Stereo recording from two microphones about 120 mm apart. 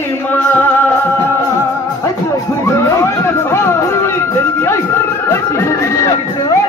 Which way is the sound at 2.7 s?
25° left (ahead or behind).